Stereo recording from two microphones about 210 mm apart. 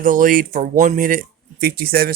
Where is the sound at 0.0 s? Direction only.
40° right (ahead or behind).